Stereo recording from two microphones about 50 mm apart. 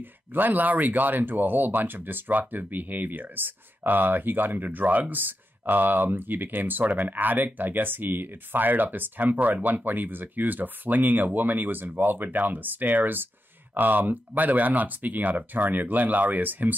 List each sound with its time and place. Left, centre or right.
0.0 s speech: right